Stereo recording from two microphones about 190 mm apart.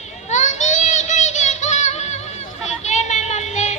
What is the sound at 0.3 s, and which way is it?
Music, 40° left (ahead or behind).